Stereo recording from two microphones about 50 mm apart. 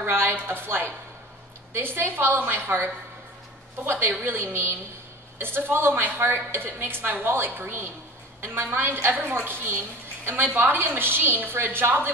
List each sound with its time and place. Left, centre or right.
0.0 s a woman's voice: right
4.2 s a woman's voice: right